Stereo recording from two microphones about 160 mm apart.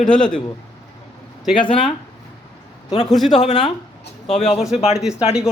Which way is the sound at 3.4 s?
45° left (ahead or behind).